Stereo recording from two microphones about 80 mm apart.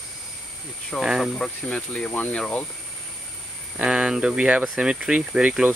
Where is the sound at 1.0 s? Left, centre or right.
Centre.